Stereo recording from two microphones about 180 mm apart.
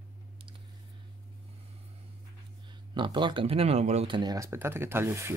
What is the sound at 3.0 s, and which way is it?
Speech, 25° right (ahead or behind).